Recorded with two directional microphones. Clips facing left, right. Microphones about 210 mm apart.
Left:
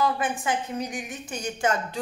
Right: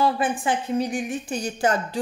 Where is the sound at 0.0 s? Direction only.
30° right (ahead or behind).